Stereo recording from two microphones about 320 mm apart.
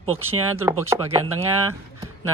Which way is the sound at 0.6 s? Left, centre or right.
Centre.